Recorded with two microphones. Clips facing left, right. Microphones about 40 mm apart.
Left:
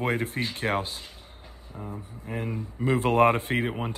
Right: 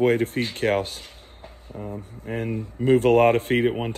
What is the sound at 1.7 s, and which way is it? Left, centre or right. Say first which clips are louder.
Speech: right 5 dB; centre.